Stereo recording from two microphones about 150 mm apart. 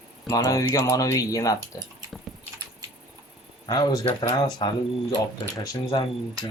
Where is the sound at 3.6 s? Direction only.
25° left (ahead or behind).